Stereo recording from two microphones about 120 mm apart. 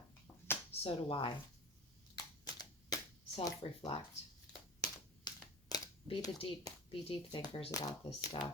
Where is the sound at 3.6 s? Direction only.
50° left (ahead or behind).